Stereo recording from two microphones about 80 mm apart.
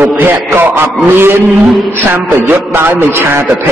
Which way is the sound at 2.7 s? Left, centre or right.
Right.